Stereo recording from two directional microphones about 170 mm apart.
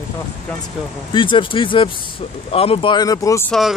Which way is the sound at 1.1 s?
30° left (ahead or behind).